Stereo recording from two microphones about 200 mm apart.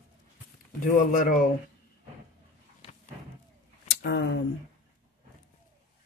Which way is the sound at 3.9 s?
65° left (ahead or behind).